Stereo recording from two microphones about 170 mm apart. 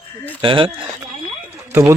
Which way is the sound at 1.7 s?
15° right (ahead or behind).